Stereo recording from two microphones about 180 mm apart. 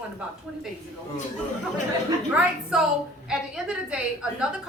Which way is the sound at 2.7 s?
5° right (ahead or behind).